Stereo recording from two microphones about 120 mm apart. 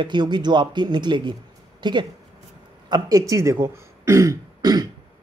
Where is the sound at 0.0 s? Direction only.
40° right (ahead or behind).